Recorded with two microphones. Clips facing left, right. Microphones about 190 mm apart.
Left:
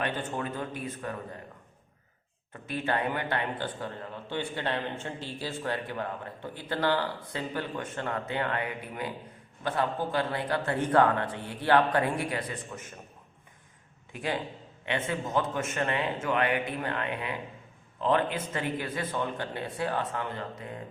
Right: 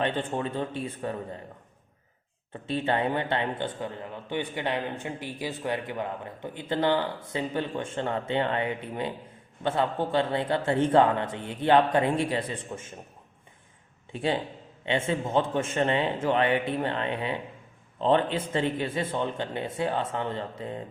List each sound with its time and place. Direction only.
0.0 s a man's voice: 30° right (ahead or behind)
2.5 s a man's voice: 25° right (ahead or behind)
14.1 s a man's voice: 30° right (ahead or behind)